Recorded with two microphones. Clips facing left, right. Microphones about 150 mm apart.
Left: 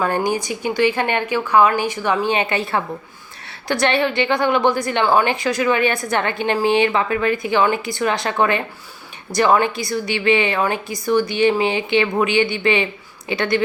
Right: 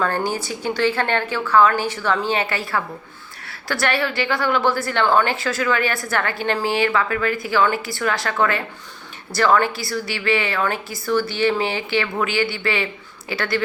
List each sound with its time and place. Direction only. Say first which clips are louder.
0.0 s a woman's voice: left 3 dB; 15° left (ahead or behind)